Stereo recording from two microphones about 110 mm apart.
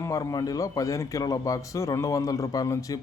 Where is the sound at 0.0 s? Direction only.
30° left (ahead or behind).